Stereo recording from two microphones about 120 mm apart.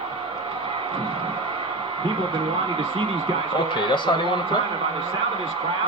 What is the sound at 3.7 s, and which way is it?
Speech, 40° left (ahead or behind).